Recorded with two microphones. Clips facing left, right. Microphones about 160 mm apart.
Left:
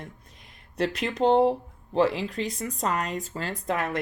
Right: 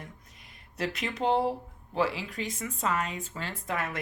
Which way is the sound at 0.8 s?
35° left (ahead or behind).